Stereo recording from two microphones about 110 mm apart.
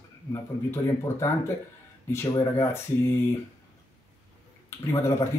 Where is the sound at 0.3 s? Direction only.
25° left (ahead or behind).